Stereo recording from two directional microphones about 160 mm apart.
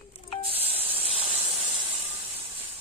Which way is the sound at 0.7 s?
10° right (ahead or behind).